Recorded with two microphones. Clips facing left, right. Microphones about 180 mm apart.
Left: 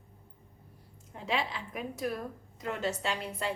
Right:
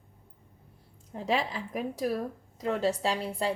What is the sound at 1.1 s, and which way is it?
A woman's voice, 40° right (ahead or behind).